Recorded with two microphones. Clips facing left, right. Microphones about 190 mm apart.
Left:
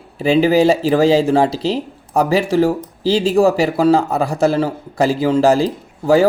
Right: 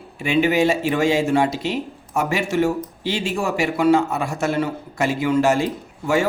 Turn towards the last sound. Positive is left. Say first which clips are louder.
# left 7 dB
turn(degrees=35)  # may be behind; listen again after turning